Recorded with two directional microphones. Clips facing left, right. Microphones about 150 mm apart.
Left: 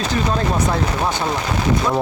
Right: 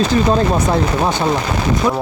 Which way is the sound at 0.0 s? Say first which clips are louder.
Right 6 dB; 30° right (ahead or behind).